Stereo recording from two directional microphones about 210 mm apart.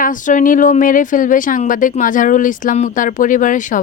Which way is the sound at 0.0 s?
40° left (ahead or behind).